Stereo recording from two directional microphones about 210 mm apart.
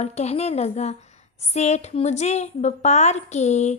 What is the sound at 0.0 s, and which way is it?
A woman's voice, 30° left (ahead or behind).